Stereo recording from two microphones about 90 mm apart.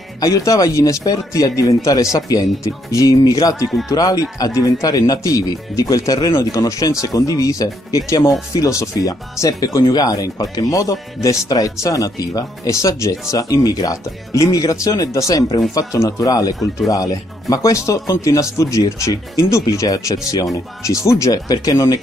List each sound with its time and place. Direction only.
0.2 s speech: 40° left (ahead or behind)